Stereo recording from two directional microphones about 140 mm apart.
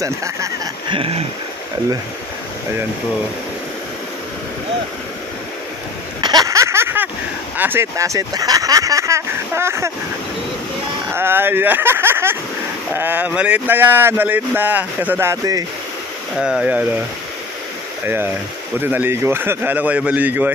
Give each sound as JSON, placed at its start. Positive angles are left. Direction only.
{"t": 0.0, "sound": "speech", "side_deg": -20}
{"t": 0.8, "sound": "a sound", "side_deg": -40}
{"t": 6.2, "sound": "a sound", "side_deg": -25}
{"t": 7.5, "sound": "speech", "side_deg": -15}
{"t": 11.1, "sound": "speech", "side_deg": -15}
{"t": 16.3, "sound": "speech", "side_deg": -5}
{"t": 18.0, "sound": "speech", "side_deg": -15}